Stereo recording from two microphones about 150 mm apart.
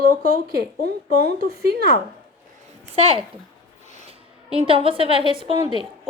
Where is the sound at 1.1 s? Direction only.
85° right.